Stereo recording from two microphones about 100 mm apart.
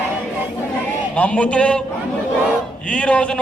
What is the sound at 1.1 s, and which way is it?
Speech, 15° left (ahead or behind).